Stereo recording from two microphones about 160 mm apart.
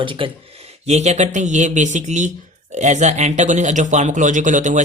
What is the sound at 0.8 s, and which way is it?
Speech, 45° right (ahead or behind).